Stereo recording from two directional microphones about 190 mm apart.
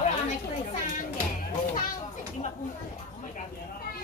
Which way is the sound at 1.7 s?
45° left (ahead or behind).